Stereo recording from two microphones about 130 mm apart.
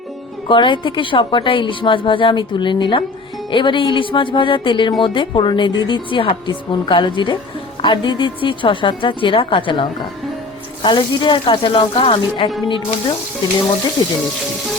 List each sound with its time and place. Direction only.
0.4 s a woman's voice: 40° left (ahead or behind)